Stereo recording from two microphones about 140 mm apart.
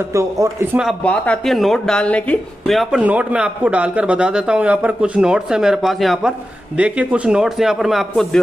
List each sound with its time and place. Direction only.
0.1 s speech: 20° right (ahead or behind)
1.0 s speech: 10° left (ahead or behind)